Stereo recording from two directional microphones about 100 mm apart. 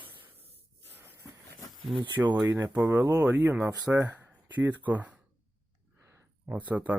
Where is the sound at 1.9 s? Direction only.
25° right (ahead or behind).